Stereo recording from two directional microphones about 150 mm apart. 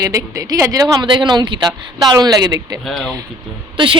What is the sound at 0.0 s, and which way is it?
Speech, 25° right (ahead or behind).